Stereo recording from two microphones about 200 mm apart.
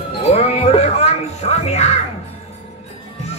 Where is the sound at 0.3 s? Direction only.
30° left (ahead or behind).